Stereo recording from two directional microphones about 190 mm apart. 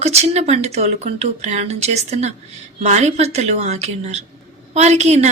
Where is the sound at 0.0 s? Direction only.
35° right (ahead or behind).